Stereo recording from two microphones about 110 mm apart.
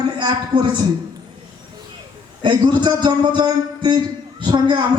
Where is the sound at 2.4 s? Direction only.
45° right (ahead or behind).